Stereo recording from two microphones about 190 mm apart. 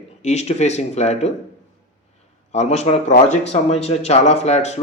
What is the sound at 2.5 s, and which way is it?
A man's voice, 35° left (ahead or behind).